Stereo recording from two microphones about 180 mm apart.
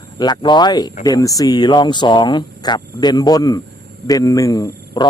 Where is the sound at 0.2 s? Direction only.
25° left (ahead or behind).